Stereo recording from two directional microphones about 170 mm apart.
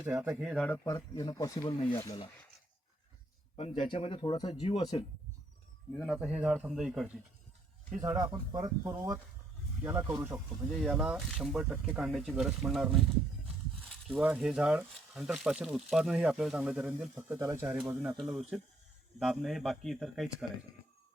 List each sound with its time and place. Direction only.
0.0 s speech: 10° right (ahead or behind)
0.5 s speech: 5° left (ahead or behind)
0.9 s speech: 25° left (ahead or behind)
1.7 s speech: 35° left (ahead or behind)
2.0 s speech: 20° left (ahead or behind)
3.5 s speech: 30° left (ahead or behind)
4.6 s speech: 40° left (ahead or behind)
5.9 s speech: centre (ahead or behind)
8.0 s speech: 20° right (ahead or behind)
10.7 s speech: centre (ahead or behind)
14.1 s speech: 10° right (ahead or behind)
18.3 s speech: centre (ahead or behind)